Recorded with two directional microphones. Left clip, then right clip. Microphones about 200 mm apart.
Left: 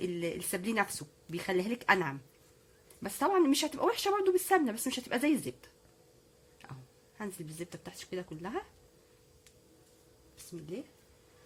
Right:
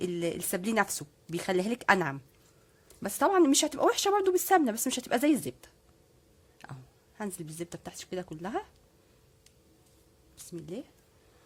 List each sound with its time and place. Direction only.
0.0 s speech: 50° right (ahead or behind)
6.6 s a sound: 50° right (ahead or behind)
7.2 s speech: 55° right (ahead or behind)
10.3 s speech: 55° right (ahead or behind)